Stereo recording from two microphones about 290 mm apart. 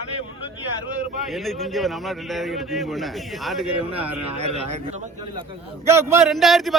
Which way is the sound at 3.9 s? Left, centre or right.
Right.